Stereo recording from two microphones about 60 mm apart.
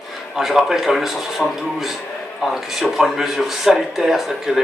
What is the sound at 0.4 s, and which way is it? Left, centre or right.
A man's voice, centre.